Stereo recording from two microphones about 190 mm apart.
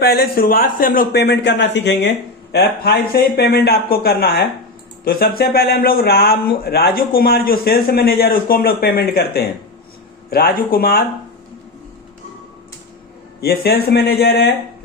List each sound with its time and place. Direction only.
0.0 s a man's voice: 55° left (ahead or behind)
13.4 s a man's voice: 55° left (ahead or behind)